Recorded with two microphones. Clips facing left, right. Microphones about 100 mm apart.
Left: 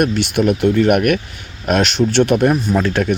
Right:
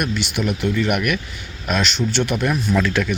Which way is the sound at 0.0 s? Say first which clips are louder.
Left 7 dB; 55° left (ahead or behind).